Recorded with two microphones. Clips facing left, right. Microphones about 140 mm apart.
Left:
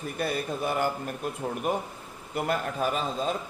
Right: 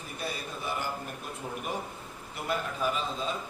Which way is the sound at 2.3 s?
50° left (ahead or behind).